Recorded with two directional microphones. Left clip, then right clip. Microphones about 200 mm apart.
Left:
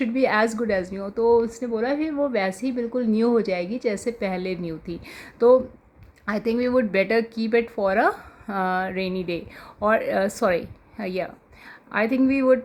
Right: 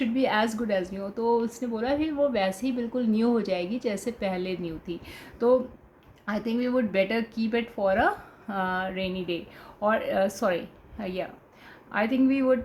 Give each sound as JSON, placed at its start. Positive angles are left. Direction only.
{"t": 0.0, "sound": "speech", "side_deg": 45}